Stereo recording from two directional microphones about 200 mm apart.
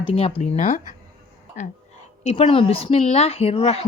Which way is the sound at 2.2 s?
30° left (ahead or behind).